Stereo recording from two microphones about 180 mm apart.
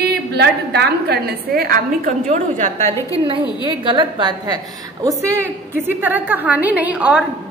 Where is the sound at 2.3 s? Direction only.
40° right (ahead or behind).